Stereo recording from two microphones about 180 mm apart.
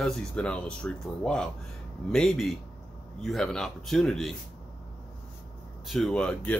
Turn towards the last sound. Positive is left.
turn(degrees=5)  # may be behind; listen again after turning